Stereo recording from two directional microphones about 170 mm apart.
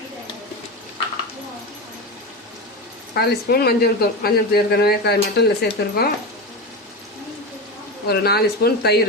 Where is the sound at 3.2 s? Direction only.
70° left (ahead or behind).